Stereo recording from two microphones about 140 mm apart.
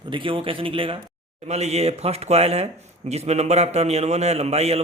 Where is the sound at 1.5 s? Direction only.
50° right (ahead or behind).